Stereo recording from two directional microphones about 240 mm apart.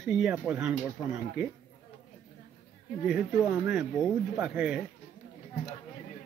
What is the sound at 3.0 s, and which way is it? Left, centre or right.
Speech, centre.